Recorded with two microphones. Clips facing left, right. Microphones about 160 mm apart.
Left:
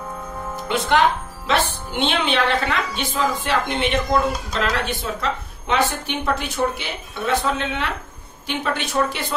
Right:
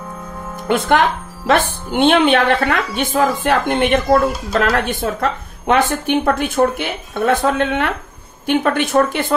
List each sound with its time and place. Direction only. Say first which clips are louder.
0.7 s speech: right 3 dB; 55° right (ahead or behind)